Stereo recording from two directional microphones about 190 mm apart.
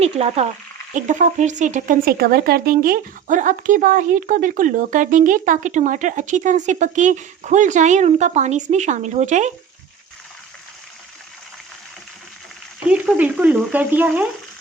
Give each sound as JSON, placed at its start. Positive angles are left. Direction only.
{"t": 0.0, "sound": "speech", "side_deg": -35}
{"t": 12.8, "sound": "speech", "side_deg": -5}